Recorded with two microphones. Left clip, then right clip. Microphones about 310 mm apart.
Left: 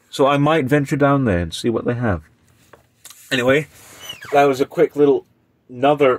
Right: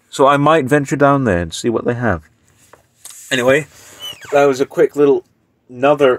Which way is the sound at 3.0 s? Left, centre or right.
Right.